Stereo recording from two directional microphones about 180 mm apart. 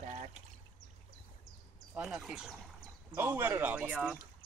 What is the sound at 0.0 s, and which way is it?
Pour, 40° right (ahead or behind).